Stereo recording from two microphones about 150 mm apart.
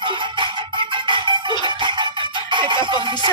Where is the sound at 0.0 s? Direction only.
30° right (ahead or behind).